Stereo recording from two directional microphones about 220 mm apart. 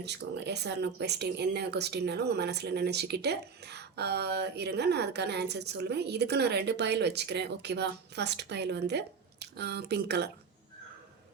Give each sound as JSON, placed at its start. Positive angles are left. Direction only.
{"t": 0.0, "sound": "speech", "side_deg": -50}